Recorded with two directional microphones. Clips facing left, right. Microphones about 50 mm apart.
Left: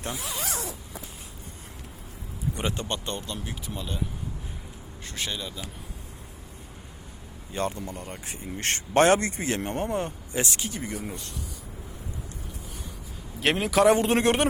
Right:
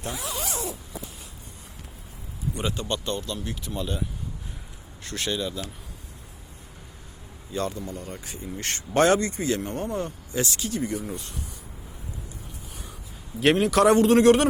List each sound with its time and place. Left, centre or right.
2.6 s a man's voice: left; by 3.8 s centre
5.0 s speech: centre
7.5 s a man's voice: left
7.9 s speech: centre
8.2 s a man's voice: left
13.4 s a man's voice: centre